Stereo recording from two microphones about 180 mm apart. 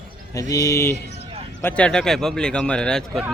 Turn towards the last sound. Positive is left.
turn(degrees=5)  # may be behind; listen again after turning